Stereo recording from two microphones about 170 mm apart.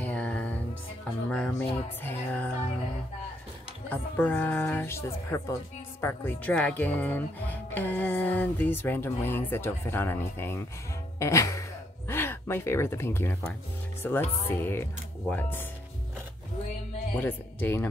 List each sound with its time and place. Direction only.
0.0 s music: 10° left (ahead or behind)
2.0 s a woman's voice: 10° left (ahead or behind)
3.9 s a woman's voice: 10° left (ahead or behind)
11.1 s music: 15° left (ahead or behind)
12.1 s a woman's voice: 15° left (ahead or behind)
17.1 s a woman's voice: 10° left (ahead or behind)